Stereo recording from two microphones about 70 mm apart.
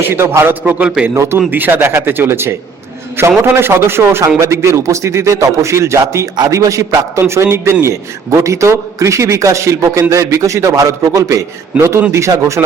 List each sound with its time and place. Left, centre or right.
0.0 s a man's voice: right
1.1 s a man's voice: right
1.4 s a man's voice: right